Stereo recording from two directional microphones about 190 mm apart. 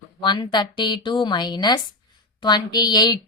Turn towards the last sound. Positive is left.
turn(degrees=20)  # may be behind; listen again after turning